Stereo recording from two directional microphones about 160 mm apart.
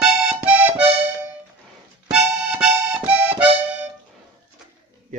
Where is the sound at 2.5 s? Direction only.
5° right (ahead or behind).